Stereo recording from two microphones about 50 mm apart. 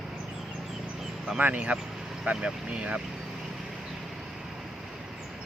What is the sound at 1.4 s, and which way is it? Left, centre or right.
Speech, right.